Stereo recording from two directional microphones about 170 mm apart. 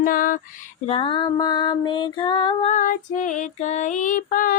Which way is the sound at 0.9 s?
30° left (ahead or behind).